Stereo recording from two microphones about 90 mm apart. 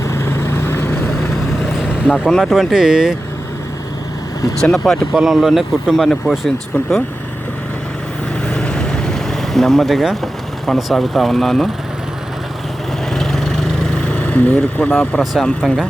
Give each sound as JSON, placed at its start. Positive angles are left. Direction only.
{"t": 0.0, "sound": "vehicle", "side_deg": 30}
{"t": 1.8, "sound": "vehicle", "side_deg": -10}
{"t": 2.4, "sound": "speech", "side_deg": -5}
{"t": 4.6, "sound": "speech", "side_deg": 5}
{"t": 8.4, "sound": "vehicle", "side_deg": 10}
{"t": 10.7, "sound": "speech", "side_deg": 0}
{"t": 13.1, "sound": "vehicle", "side_deg": 5}
{"t": 15.2, "sound": "speech", "side_deg": 0}